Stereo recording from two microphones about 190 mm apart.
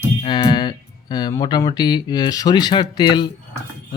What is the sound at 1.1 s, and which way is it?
Speech, 20° left (ahead or behind).